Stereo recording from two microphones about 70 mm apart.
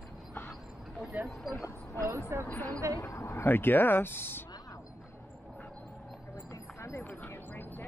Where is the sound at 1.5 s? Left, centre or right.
Left.